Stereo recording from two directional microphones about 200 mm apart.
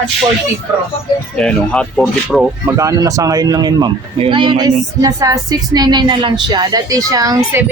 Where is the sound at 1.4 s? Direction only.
5° left (ahead or behind).